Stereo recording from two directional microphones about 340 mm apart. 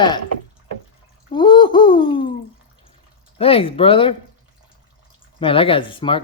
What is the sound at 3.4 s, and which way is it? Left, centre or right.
Speech, centre.